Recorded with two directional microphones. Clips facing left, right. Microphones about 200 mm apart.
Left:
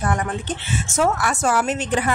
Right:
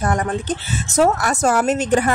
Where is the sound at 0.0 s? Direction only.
40° right (ahead or behind).